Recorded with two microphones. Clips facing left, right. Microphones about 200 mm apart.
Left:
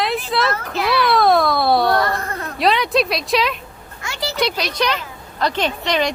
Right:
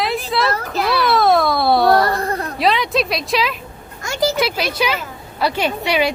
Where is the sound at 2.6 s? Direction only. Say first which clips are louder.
Left 1 dB; centre (ahead or behind).